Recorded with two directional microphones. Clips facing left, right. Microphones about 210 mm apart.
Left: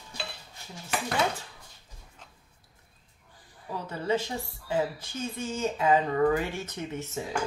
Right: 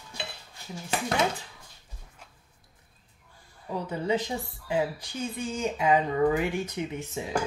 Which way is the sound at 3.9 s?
15° right (ahead or behind).